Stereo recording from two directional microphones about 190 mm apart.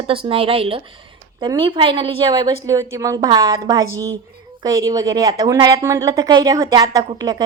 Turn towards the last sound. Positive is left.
turn(degrees=-20)  # may be behind; listen again after turning